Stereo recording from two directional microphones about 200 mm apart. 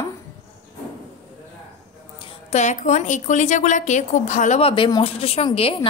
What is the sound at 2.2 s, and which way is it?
A woman's voice, 35° left (ahead or behind).